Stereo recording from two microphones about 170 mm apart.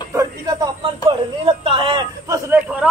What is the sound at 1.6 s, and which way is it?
Speech, 30° right (ahead or behind).